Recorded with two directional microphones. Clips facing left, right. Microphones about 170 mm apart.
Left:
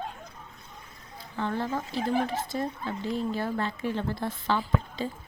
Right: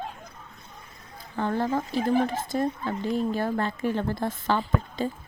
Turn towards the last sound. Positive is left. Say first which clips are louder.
# right 2 dB
turn(degrees=-45)  # may be behind; listen again after turning